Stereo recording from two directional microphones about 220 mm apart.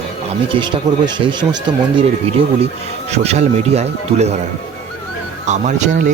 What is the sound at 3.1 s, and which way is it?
Speech, 30° right (ahead or behind).